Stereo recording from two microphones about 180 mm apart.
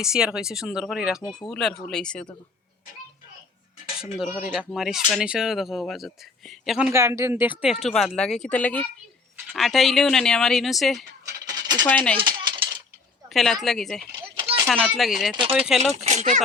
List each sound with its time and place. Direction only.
0.0 s speech: 5° right (ahead or behind)
4.4 s speech: 5° right (ahead or behind)
11.3 s coin: 20° right (ahead or behind)
11.9 s speech: 10° left (ahead or behind)
12.1 s coin: 30° right (ahead or behind)
13.3 s speech: centre (ahead or behind)
14.1 s a sound: 25° right (ahead or behind)
14.7 s speech: centre (ahead or behind)
15.9 s speech: 40° right (ahead or behind)